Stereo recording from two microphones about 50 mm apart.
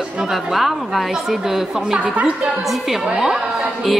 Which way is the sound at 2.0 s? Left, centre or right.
Right.